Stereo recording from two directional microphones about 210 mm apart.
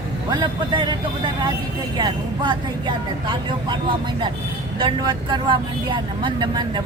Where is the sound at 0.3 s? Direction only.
20° right (ahead or behind).